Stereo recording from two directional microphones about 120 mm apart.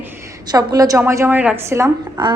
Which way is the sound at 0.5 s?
30° right (ahead or behind).